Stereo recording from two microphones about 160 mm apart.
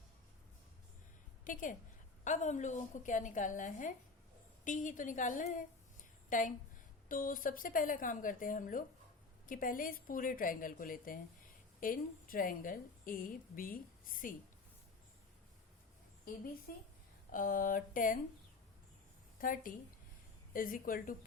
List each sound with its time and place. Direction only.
1.5 s a woman's voice: 55° left (ahead or behind)
16.7 s a woman's voice: 65° left (ahead or behind)
19.4 s a woman's voice: 60° left (ahead or behind)